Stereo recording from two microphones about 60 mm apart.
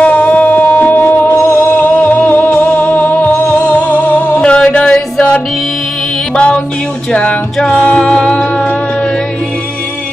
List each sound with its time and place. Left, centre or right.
0.0 s music: left
4.4 s mantra: centre
4.6 s music: centre
6.3 s music: centre